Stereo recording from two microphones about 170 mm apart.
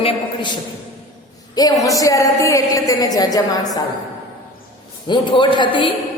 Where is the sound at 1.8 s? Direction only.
20° left (ahead or behind).